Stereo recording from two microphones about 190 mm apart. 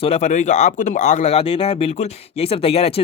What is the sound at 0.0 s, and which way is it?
Speech, 35° left (ahead or behind).